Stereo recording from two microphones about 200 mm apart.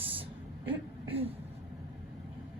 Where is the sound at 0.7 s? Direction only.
30° right (ahead or behind).